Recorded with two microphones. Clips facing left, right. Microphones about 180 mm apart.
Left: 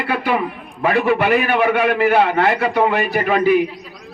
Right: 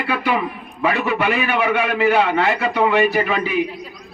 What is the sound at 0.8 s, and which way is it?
A man's voice, 50° left (ahead or behind).